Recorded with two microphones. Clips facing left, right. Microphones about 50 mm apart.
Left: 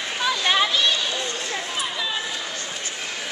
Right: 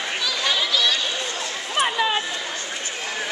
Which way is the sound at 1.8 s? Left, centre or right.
Right.